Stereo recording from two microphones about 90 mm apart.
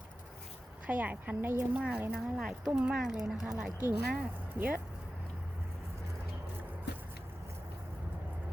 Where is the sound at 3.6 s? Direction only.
20° right (ahead or behind).